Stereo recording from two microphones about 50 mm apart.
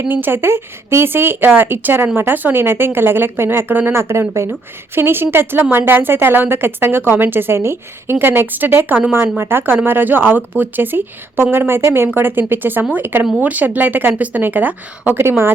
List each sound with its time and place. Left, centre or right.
0.1 s speech: right
3.9 s speech: right
4.9 s speech: right
8.2 s speech: right
11.8 s speech: right
12.0 s speech: right
13.4 s speech: right
15.2 s speech: right